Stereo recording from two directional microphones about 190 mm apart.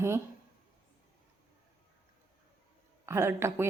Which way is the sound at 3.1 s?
15° right (ahead or behind).